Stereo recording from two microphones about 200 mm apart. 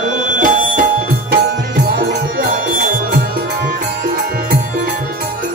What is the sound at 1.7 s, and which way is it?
Music, 50° right (ahead or behind).